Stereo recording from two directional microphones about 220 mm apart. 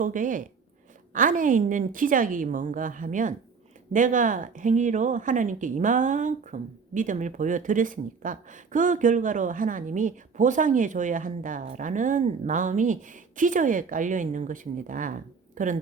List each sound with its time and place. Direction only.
0.0 s speech: 35° right (ahead or behind)